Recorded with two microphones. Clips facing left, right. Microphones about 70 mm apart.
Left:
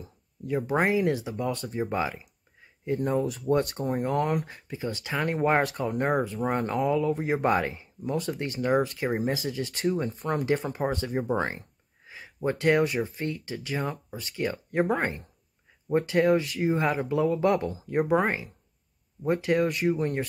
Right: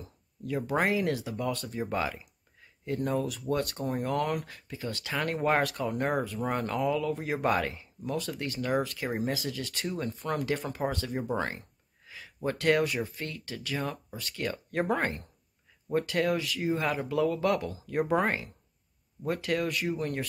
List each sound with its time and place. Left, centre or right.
0.0 s speech: centre
12.1 s a sound: left
12.4 s speech: centre
15.9 s speech: left
16.3 s speech: left
16.7 s speech: centre
18.1 s speech: centre
19.2 s speech: left